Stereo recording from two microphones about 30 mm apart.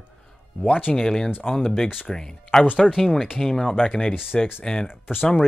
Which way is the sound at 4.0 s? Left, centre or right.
Left.